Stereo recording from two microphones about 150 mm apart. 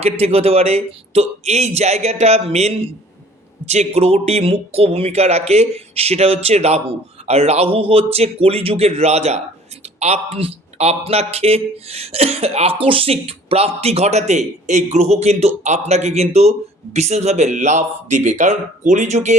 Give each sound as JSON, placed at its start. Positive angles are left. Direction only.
{"t": 0.0, "sound": "a man's voice", "side_deg": -40}